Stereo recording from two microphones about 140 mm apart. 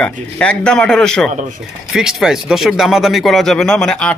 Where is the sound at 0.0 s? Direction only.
10° left (ahead or behind).